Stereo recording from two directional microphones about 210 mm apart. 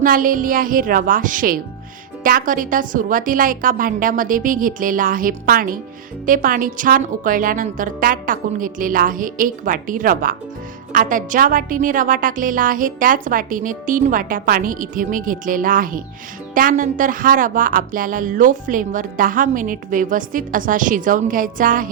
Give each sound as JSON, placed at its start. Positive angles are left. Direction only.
{"t": 0.0, "sound": "speech", "side_deg": -40}